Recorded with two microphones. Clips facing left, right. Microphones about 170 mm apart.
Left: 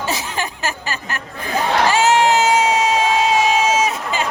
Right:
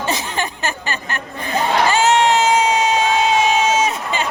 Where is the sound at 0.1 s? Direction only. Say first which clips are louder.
Right 1 dB; 5° left (ahead or behind).